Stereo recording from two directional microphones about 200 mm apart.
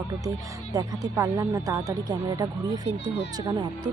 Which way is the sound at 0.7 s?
20° right (ahead or behind).